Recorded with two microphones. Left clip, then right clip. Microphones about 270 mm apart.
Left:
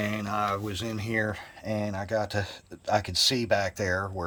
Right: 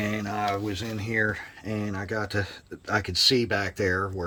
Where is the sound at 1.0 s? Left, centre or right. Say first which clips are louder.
Right 4 dB; left.